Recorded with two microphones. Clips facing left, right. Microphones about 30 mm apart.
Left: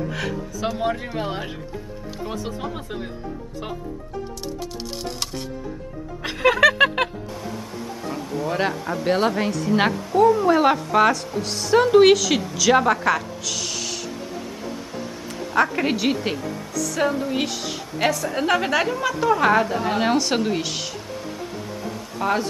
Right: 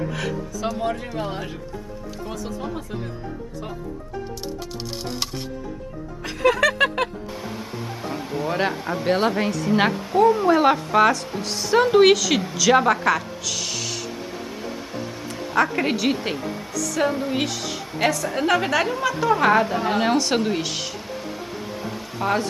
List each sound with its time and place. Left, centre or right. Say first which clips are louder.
0.1 s speech: even; centre; by 3.1 s left
6.4 s a sound: left 2 dB; centre
7.4 s a sound: left 1 dB; right
8.7 s speech: even; centre
9.0 s a woman's voice: even; centre
9.9 s speech: left 1 dB; centre
10.5 s a woman's voice: even; centre
12.5 s a sound: even; centre
16.3 s a woman's voice: even; right
16.7 s music: even; centre
17.1 s speech: even; centre
17.4 s a woman's voice: even; centre
21.4 s a sound: even; centre